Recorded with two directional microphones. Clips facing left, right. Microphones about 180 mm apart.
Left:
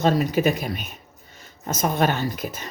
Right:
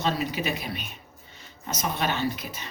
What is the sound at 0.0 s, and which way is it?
Speech, 45° left (ahead or behind).